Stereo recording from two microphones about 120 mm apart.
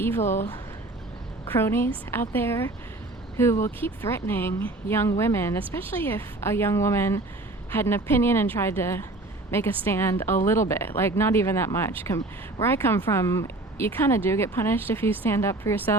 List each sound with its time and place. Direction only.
0.2 s speech: 75° left (ahead or behind)
1.5 s a woman's voice: 20° left (ahead or behind)